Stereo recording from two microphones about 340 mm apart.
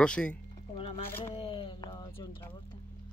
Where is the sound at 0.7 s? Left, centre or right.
Centre.